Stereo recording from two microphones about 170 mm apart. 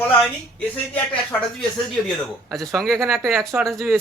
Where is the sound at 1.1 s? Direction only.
5° left (ahead or behind).